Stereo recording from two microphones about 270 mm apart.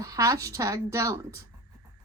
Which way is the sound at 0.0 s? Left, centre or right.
Centre.